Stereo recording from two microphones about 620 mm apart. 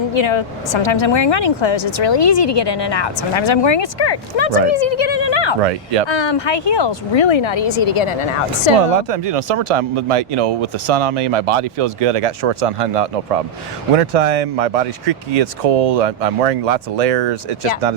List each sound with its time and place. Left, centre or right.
0.3 s speech: left
5.1 s speech: left
5.6 s speech: right
6.1 s speech: left
8.9 s speech: right
11.9 s speech: right
13.9 s speech: right